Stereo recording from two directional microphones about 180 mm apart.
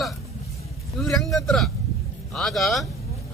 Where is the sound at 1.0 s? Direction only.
Centre (ahead or behind).